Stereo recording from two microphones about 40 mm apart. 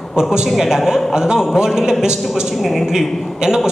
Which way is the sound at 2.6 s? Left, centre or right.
Centre.